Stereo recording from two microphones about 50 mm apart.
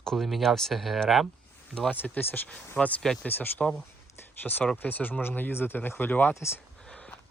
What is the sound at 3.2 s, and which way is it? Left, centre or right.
Speech, left.